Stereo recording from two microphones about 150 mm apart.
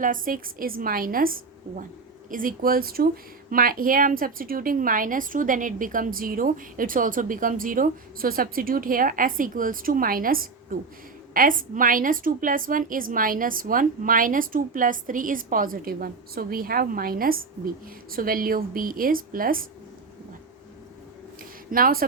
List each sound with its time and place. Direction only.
0.0 s a woman's voice: 65° right (ahead or behind)
2.3 s a woman's voice: 65° right (ahead or behind)
21.7 s a woman's voice: 70° right (ahead or behind)